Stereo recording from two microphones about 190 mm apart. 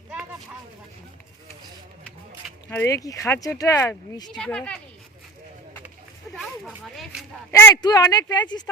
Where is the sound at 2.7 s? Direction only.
15° left (ahead or behind).